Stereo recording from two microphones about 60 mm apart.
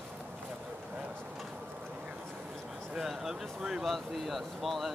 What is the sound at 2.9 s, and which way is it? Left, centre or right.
Speech, centre.